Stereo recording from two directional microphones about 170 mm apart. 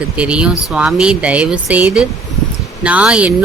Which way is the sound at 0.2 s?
5° right (ahead or behind).